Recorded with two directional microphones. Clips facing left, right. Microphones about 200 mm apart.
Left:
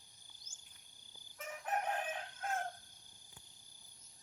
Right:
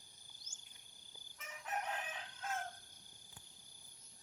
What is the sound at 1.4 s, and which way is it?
Chicken, 55° left (ahead or behind).